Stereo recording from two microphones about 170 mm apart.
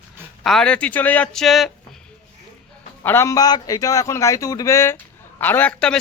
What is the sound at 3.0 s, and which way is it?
A man's voice, 15° left (ahead or behind).